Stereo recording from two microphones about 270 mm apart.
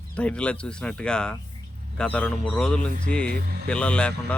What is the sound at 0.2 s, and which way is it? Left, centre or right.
Speech, centre.